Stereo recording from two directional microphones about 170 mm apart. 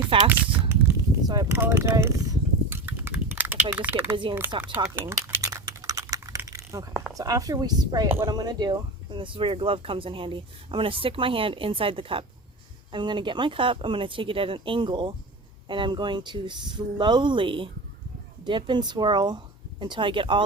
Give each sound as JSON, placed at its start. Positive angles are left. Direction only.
{"t": 0.1, "sound": "speech", "side_deg": -30}
{"t": 0.7, "sound": "a sound", "side_deg": -20}
{"t": 1.6, "sound": "speech", "side_deg": -15}
{"t": 2.6, "sound": "a sound", "side_deg": -10}
{"t": 4.6, "sound": "typing", "side_deg": -15}
{"t": 7.1, "sound": "speech", "side_deg": -20}